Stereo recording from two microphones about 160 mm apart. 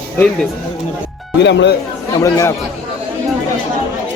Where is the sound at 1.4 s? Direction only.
90° left.